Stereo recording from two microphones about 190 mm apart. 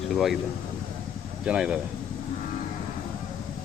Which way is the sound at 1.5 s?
5° right (ahead or behind).